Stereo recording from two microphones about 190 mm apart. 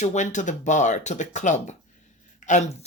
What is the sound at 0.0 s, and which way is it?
Speech, 40° left (ahead or behind).